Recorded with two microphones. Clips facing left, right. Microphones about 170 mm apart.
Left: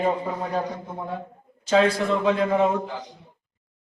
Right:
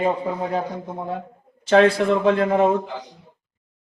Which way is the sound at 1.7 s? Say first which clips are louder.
Right 4 dB; 55° right (ahead or behind).